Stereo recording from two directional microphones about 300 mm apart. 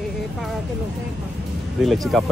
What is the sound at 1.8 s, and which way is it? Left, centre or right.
Speech, centre.